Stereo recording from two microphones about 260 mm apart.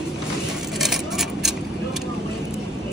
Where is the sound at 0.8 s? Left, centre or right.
Centre.